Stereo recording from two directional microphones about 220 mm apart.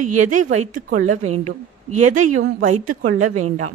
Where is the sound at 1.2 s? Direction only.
90° right.